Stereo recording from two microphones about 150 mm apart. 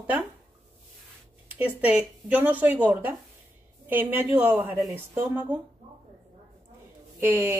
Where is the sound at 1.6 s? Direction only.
10° right (ahead or behind).